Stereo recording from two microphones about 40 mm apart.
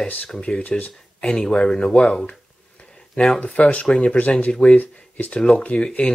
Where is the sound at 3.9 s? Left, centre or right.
Left.